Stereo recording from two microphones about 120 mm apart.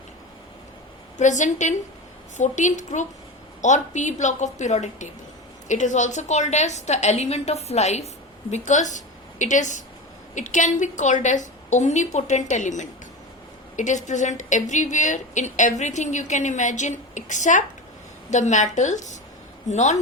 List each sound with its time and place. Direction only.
1.2 s a woman's voice: 90° left
5.6 s a woman's voice: 90° left
19.6 s a woman's voice: 75° left (ahead or behind)